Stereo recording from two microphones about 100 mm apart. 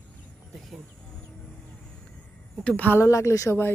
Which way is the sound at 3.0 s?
30° left (ahead or behind).